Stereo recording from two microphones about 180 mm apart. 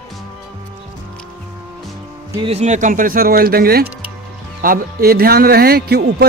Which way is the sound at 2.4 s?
40° right (ahead or behind).